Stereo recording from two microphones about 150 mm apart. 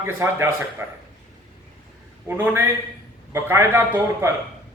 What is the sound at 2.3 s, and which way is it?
Speech, 10° right (ahead or behind).